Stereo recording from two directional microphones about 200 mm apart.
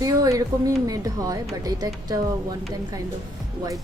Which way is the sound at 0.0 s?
15° right (ahead or behind).